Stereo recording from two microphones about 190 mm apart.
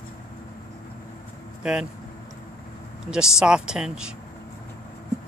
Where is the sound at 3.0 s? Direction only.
5° right (ahead or behind).